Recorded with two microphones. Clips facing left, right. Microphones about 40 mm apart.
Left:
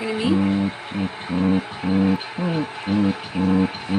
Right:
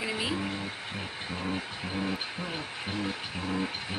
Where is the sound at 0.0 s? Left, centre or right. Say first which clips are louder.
Left 10 dB; centre.